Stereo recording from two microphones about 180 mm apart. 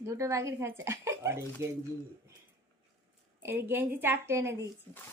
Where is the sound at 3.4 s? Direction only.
10° right (ahead or behind).